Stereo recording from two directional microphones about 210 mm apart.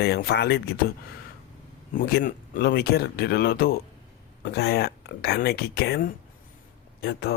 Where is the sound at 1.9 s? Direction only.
45° left (ahead or behind).